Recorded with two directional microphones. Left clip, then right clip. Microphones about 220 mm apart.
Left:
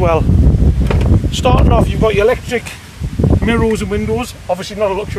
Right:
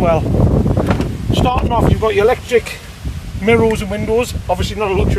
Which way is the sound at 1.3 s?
30° left (ahead or behind).